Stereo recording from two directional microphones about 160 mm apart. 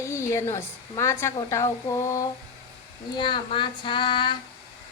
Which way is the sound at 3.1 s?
30° left (ahead or behind).